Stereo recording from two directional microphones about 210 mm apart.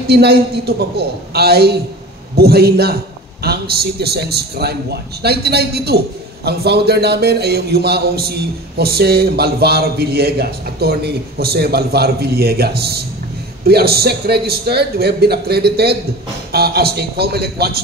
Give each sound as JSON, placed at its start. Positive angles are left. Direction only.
{"t": 0.0, "sound": "a man's voice", "side_deg": -50}